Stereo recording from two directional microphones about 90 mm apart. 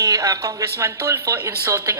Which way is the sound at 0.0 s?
35° right (ahead or behind).